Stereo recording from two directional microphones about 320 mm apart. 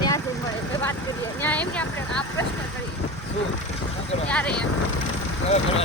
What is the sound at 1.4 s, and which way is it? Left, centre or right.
Speech, centre.